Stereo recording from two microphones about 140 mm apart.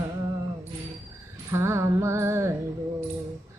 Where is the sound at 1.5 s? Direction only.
20° right (ahead or behind).